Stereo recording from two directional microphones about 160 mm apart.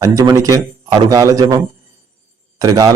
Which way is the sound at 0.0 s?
20° right (ahead or behind).